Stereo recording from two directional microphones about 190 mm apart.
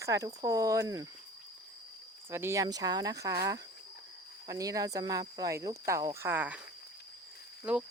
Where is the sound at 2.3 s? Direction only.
15° right (ahead or behind).